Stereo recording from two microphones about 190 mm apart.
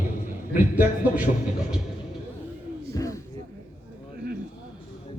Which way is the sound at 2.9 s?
15° left (ahead or behind).